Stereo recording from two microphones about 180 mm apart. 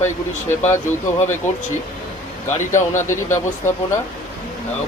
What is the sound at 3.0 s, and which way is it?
Speech, 15° left (ahead or behind).